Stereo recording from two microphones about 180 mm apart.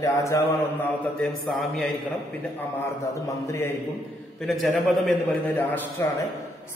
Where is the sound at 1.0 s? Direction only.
Centre (ahead or behind).